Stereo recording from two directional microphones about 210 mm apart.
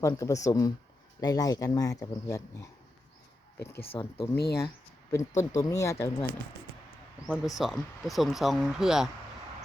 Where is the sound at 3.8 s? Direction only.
25° left (ahead or behind).